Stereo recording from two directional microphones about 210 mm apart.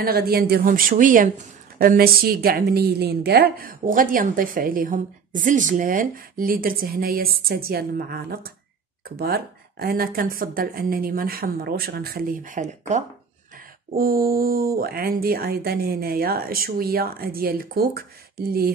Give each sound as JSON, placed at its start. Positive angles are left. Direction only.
{"t": 0.0, "sound": "a woman's voice", "side_deg": -45}